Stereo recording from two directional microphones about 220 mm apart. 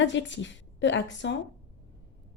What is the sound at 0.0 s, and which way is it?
A woman's voice, 55° left (ahead or behind).